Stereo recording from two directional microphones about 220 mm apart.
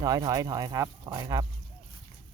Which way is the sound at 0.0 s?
15° right (ahead or behind).